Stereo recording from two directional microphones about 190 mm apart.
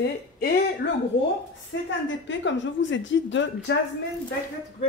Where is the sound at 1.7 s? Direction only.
75° left (ahead or behind).